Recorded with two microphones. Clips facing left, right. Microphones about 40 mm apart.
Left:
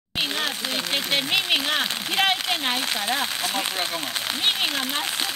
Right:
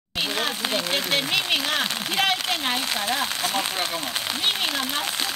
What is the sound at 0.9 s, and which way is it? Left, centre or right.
Speech, centre.